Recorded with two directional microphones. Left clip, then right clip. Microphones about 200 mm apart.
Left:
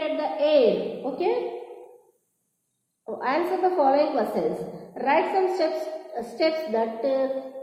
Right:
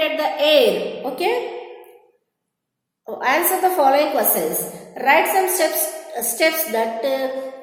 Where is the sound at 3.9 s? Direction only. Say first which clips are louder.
Right 5 dB; 15° right (ahead or behind).